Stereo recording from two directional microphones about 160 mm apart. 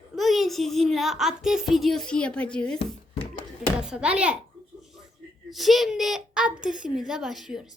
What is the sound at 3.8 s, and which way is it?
Speech, 5° right (ahead or behind).